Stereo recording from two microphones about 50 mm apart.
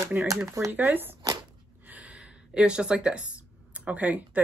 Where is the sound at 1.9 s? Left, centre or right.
Right.